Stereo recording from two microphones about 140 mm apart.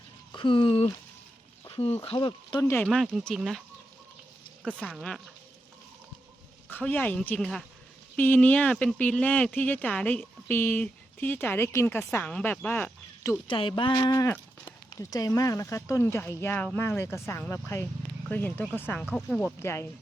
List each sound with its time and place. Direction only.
0.3 s speech: 35° left (ahead or behind)
2.1 s speech: 30° left (ahead or behind)
2.8 s speech: 5° left (ahead or behind)
4.8 s speech: 5° left (ahead or behind)
6.7 s speech: 15° left (ahead or behind)
13.5 s speech: 35° left (ahead or behind)
13.9 s speech: 25° left (ahead or behind)